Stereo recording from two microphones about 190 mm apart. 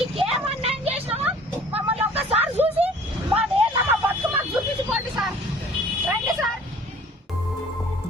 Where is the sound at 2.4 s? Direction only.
10° right (ahead or behind).